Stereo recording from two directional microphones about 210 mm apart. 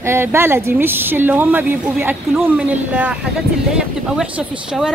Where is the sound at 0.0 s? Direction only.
10° right (ahead or behind).